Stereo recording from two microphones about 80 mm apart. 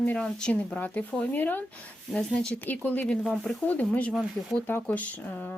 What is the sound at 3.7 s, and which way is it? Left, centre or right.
A woman's voice, centre.